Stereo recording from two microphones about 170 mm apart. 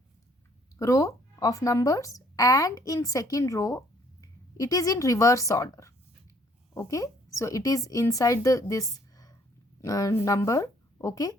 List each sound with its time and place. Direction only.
0.8 s a woman's voice: 20° left (ahead or behind)